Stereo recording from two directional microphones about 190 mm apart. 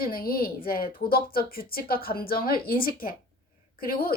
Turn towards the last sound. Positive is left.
turn(degrees=50)  # may be behind; listen again after turning